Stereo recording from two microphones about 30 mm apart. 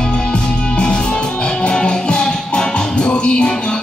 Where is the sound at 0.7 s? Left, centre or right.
Left.